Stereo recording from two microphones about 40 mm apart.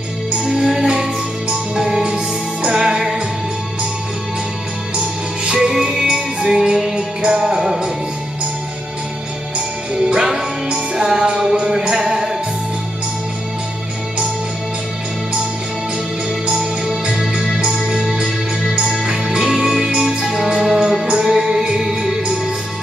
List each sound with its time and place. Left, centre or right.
0.5 s music: centre
5.4 s music: right
10.0 s music: centre
16.4 s music: right
18.2 s music: centre